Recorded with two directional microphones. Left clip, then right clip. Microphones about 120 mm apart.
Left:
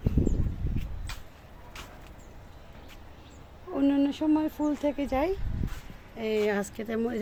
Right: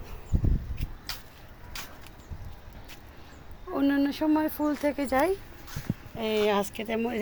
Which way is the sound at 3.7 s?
5° left (ahead or behind).